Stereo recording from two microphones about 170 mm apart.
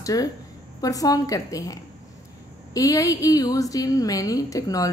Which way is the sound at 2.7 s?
20° left (ahead or behind).